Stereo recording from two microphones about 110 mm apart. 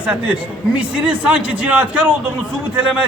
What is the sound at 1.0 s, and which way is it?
A man's voice, 10° right (ahead or behind).